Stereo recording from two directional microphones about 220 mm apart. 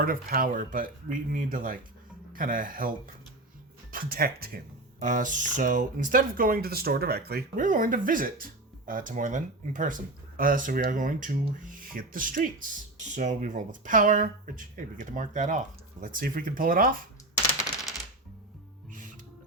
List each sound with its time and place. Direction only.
0.0 s speech: 40° right (ahead or behind)
3.9 s speech: 40° right (ahead or behind)
18.9 s music: 35° right (ahead or behind)